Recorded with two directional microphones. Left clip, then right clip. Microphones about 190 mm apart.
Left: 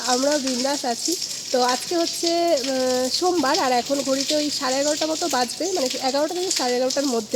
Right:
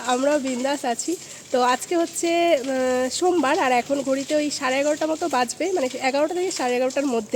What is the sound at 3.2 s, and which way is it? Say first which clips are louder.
Speech: right 2 dB; 15° right (ahead or behind).